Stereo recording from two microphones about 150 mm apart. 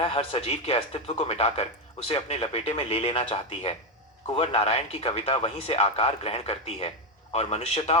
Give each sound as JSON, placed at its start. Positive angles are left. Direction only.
{"t": 0.0, "sound": "speech", "side_deg": 40}